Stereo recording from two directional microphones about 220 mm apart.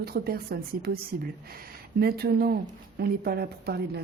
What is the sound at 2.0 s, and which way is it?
A woman's voice, 45° right (ahead or behind).